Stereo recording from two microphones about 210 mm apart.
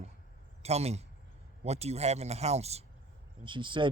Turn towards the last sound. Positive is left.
turn(degrees=-25)  # may be behind; listen again after turning